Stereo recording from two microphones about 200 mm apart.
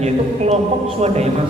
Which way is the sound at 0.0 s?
30° right (ahead or behind).